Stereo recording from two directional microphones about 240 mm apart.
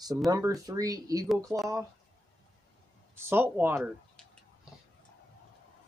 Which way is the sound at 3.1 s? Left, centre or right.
Centre.